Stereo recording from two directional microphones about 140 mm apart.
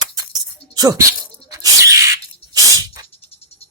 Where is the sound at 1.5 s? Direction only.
25° right (ahead or behind).